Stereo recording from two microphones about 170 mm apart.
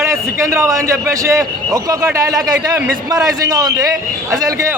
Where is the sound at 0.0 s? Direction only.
15° right (ahead or behind).